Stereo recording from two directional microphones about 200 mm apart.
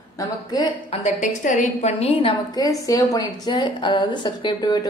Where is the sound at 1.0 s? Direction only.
40° left (ahead or behind).